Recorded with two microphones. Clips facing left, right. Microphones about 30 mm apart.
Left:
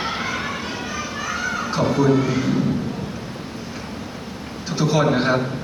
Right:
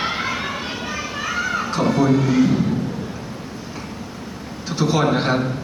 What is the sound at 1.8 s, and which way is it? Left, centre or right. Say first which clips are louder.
Music: right 1 dB; centre.